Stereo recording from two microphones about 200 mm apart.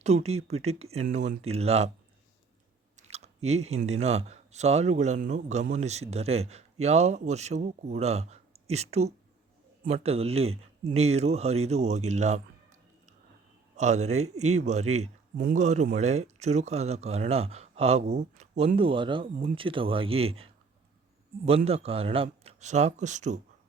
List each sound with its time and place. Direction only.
0.0 s speech: 30° right (ahead or behind)
2.9 s chewing: 35° right (ahead or behind)
3.8 s speech: 35° right (ahead or behind)
13.7 s speech: 35° right (ahead or behind)